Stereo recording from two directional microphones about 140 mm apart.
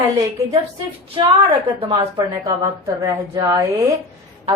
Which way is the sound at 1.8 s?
30° right (ahead or behind).